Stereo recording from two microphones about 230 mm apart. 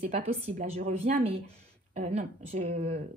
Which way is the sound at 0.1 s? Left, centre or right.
Right.